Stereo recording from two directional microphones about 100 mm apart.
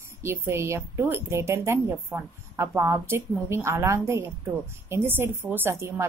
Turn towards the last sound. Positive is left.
turn(degrees=-25)  # may be behind; listen again after turning